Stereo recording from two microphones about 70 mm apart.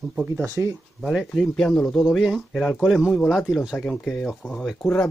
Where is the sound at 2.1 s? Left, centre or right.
Centre.